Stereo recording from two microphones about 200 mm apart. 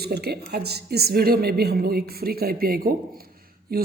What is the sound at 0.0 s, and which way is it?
Speech, 55° right (ahead or behind).